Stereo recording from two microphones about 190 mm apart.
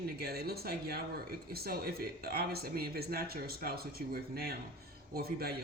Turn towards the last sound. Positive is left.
turn(degrees=-55)  # may be behind; listen again after turning